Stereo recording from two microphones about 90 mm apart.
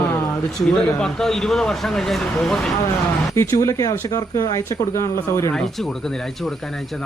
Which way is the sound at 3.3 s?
35° left (ahead or behind).